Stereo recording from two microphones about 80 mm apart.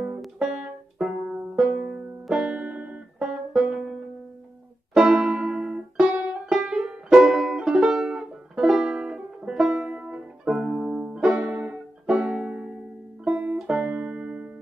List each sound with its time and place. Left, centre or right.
0.2 s music: centre
4.9 s music: centre
6.5 s music: centre